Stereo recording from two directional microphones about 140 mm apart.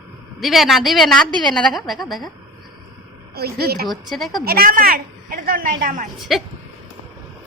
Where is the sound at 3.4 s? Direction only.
90° right.